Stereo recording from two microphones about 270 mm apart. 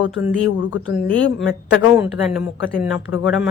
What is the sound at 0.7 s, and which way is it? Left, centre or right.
Speech, left.